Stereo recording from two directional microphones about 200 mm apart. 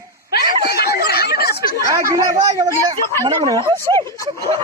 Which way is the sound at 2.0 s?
15° right (ahead or behind).